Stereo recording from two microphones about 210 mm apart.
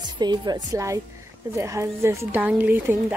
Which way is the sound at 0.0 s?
20° right (ahead or behind).